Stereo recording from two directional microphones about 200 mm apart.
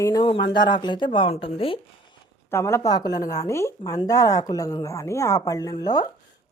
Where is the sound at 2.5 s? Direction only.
15° left (ahead or behind).